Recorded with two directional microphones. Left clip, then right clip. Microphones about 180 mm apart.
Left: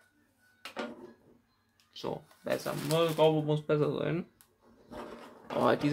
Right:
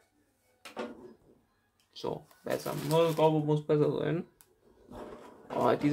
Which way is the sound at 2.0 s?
Centre (ahead or behind).